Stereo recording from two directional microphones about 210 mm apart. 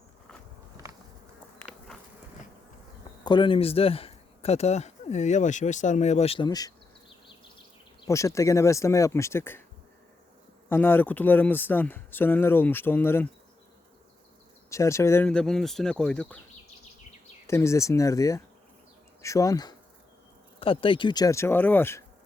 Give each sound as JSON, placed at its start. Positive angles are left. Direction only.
{"t": 3.2, "sound": "speech", "side_deg": 20}
{"t": 8.0, "sound": "speech", "side_deg": 15}
{"t": 10.7, "sound": "speech", "side_deg": 10}
{"t": 14.7, "sound": "speech", "side_deg": 15}
{"t": 17.4, "sound": "speech", "side_deg": 15}